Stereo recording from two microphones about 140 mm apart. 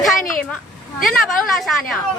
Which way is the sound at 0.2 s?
75° left (ahead or behind).